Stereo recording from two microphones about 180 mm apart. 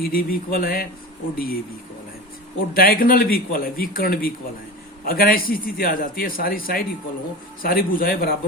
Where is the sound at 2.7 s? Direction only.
55° left (ahead or behind).